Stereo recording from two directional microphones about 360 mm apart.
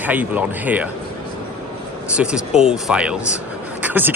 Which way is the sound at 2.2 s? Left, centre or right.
Centre.